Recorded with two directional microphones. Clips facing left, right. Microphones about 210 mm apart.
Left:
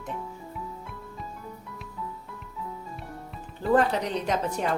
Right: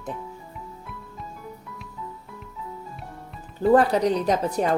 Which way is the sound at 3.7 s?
40° right (ahead or behind).